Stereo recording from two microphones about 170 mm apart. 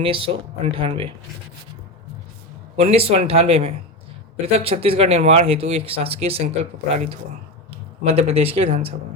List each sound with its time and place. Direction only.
0.0 s speech: 30° right (ahead or behind)
2.7 s speech: 35° right (ahead or behind)